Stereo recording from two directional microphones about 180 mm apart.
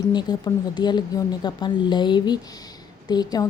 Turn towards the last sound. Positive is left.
turn(degrees=20)  # may be behind; listen again after turning